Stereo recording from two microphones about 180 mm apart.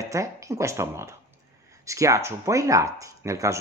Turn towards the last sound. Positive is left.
turn(degrees=-15)  # may be behind; listen again after turning